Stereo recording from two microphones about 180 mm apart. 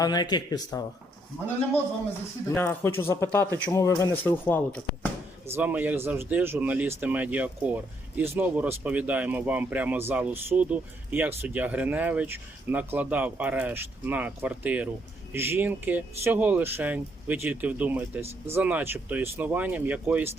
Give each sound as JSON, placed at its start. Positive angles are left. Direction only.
{"t": 0.0, "sound": "speech", "side_deg": 25}
{"t": 2.6, "sound": "speech", "side_deg": 10}
{"t": 5.5, "sound": "speech", "side_deg": -10}
{"t": 18.2, "sound": "speech", "side_deg": -35}
{"t": 18.5, "sound": "speech", "side_deg": -10}